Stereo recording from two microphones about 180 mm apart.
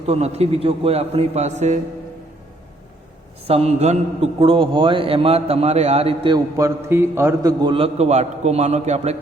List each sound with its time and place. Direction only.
0.0 s a man's voice: 35° right (ahead or behind)
3.4 s a man's voice: 35° right (ahead or behind)